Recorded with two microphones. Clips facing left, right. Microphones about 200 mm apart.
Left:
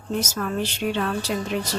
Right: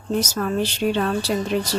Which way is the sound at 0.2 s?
35° right (ahead or behind).